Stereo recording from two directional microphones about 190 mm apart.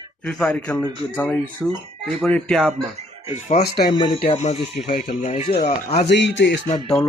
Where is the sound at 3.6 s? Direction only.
55° left (ahead or behind).